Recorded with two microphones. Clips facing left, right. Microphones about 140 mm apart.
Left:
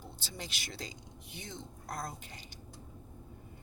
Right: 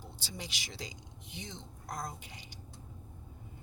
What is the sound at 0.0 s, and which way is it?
Speech, 15° right (ahead or behind).